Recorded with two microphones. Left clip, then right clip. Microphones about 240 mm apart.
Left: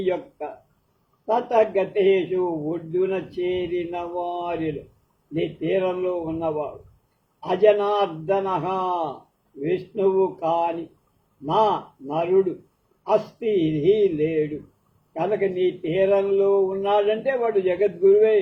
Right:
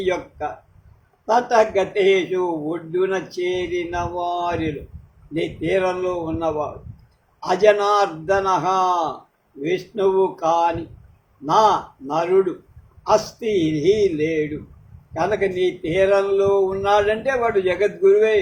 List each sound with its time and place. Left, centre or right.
0.0 s speech: right
14.2 s speech: right